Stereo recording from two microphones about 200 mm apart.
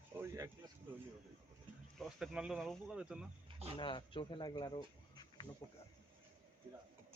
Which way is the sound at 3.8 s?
25° left (ahead or behind).